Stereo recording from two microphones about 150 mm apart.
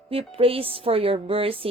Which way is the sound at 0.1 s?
40° right (ahead or behind).